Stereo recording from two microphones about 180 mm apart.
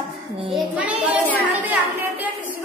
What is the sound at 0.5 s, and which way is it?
Speech, 5° right (ahead or behind).